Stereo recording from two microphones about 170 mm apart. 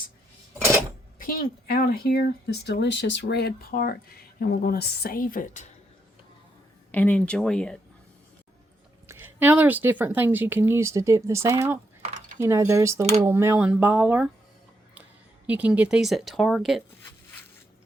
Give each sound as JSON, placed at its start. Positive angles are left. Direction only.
{"t": 1.2, "sound": "speech", "side_deg": 60}
{"t": 6.9, "sound": "speech", "side_deg": 10}
{"t": 9.0, "sound": "speech", "side_deg": -10}
{"t": 12.0, "sound": "a sound", "side_deg": -45}
{"t": 12.4, "sound": "speech", "side_deg": -15}
{"t": 15.4, "sound": "speech", "side_deg": -10}